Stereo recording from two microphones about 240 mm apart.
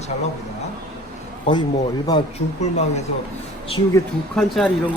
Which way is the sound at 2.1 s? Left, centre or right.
Left.